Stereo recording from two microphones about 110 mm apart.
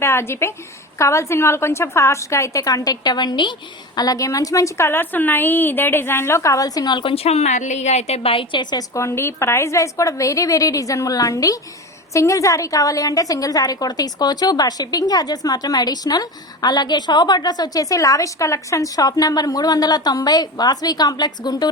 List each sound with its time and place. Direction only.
0.0 s a woman's voice: 25° left (ahead or behind); by 7.1 s 40° left (ahead or behind)
7.1 s a woman's voice: 70° left (ahead or behind)
8.7 s a woman's voice: 25° left (ahead or behind)